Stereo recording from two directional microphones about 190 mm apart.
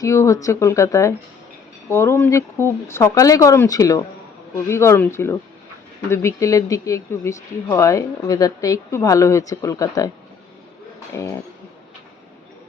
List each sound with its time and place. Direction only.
0.0 s speech: 15° left (ahead or behind)
11.1 s speech: 15° left (ahead or behind)